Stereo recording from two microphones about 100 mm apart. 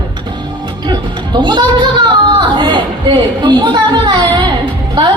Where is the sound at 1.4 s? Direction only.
50° right (ahead or behind).